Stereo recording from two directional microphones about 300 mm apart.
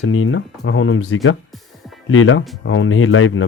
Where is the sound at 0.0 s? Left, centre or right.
Left.